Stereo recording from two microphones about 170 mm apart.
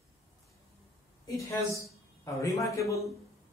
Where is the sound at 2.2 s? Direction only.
20° left (ahead or behind).